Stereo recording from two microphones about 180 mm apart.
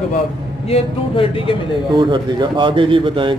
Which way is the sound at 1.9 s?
25° right (ahead or behind).